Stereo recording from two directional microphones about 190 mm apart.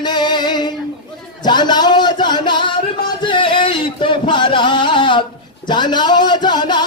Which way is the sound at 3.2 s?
25° left (ahead or behind).